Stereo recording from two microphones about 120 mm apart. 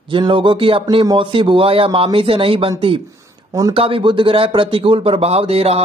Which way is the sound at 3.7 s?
50° right (ahead or behind).